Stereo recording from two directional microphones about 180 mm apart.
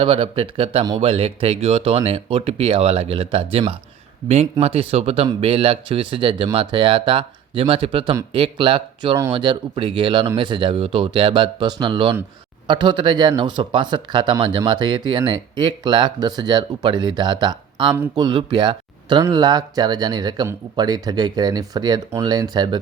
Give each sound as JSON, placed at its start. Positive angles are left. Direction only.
{"t": 0.0, "sound": "speech", "side_deg": -30}